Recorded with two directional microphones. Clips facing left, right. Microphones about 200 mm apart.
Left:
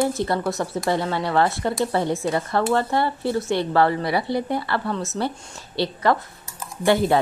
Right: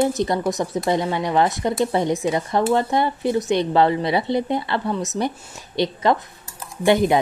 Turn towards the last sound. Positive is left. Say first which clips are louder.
# right 2 dB
turn(degrees=-20)  # may be behind; listen again after turning